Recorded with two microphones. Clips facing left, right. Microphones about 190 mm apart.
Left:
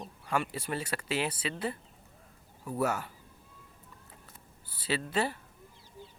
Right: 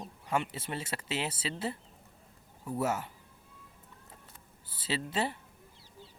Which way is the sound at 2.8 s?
20° right (ahead or behind).